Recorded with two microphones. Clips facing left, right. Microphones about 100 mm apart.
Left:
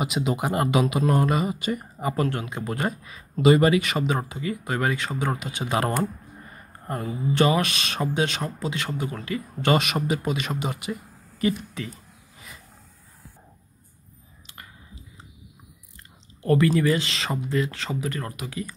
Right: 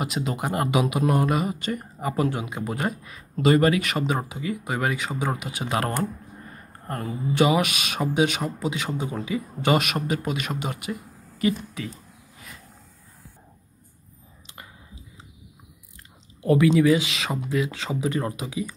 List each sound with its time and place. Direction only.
0.0 s speech: 5° left (ahead or behind)
2.2 s speech: 10° right (ahead or behind); by 7.2 s 5° left (ahead or behind)
7.3 s speech: 10° right (ahead or behind)
14.4 s whispering: 15° right (ahead or behind)
16.3 s speech: 10° right (ahead or behind)